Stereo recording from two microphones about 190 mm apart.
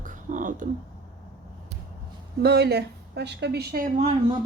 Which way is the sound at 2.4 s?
55° right (ahead or behind).